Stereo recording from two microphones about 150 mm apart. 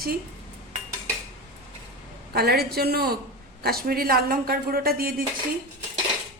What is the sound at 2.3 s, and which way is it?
A woman's voice, 90° right.